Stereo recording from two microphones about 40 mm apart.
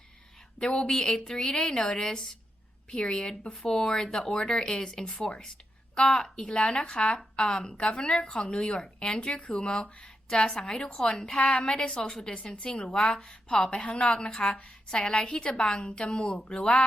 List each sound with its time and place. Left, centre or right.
0.6 s a woman's voice: centre
11.6 s a woman's voice: left
11.9 s a woman's voice: centre
14.8 s a woman's voice: left